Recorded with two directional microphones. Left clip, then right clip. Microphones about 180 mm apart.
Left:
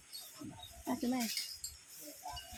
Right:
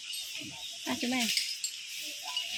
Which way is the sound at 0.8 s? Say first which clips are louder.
Right 6 dB; 10° right (ahead or behind).